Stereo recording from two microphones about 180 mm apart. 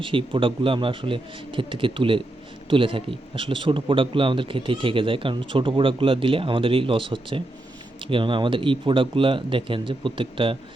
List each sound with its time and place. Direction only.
0.0 s a man's voice: 30° right (ahead or behind)